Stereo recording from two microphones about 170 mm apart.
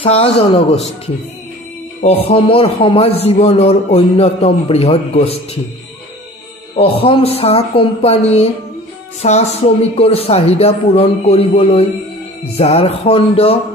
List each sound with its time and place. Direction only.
0.0 s a man's voice: 35° left (ahead or behind)
2.0 s a man's voice: 35° left (ahead or behind)
6.8 s a man's voice: 35° left (ahead or behind)